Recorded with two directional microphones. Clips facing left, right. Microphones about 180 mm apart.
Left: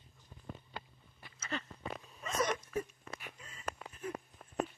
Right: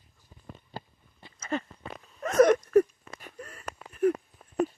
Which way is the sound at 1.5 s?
45° right (ahead or behind).